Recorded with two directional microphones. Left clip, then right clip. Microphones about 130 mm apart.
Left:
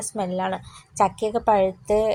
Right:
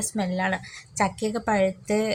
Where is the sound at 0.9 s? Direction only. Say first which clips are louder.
Left 5 dB; 10° left (ahead or behind).